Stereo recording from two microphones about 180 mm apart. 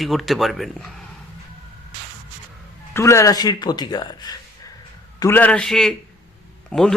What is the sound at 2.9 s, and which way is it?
Speech, 15° left (ahead or behind).